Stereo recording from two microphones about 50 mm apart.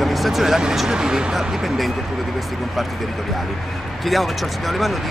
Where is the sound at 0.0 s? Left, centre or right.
Centre.